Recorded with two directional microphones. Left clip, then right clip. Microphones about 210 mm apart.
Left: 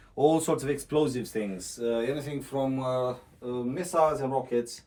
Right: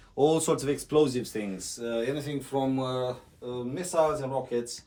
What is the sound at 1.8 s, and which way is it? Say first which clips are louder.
Speech: left 2 dB; 10° right (ahead or behind).